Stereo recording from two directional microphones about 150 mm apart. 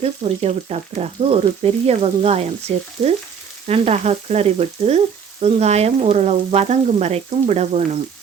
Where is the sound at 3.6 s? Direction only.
45° right (ahead or behind).